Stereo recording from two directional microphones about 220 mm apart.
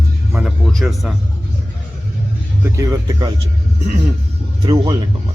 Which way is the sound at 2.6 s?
15° right (ahead or behind).